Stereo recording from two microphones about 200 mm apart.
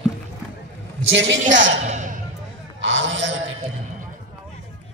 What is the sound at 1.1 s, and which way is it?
Speech, 65° right (ahead or behind).